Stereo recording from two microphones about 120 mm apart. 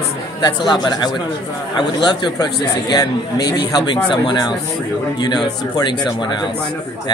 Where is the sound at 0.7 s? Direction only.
35° left (ahead or behind).